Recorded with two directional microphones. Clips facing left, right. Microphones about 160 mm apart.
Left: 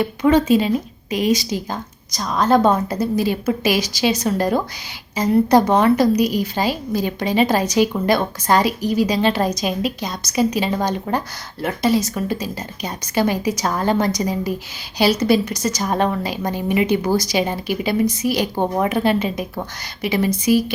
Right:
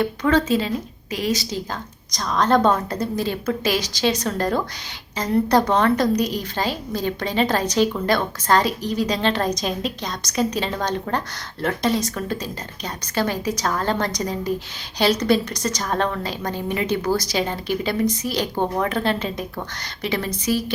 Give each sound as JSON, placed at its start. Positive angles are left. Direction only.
{"t": 0.0, "sound": "a woman's voice", "side_deg": 10}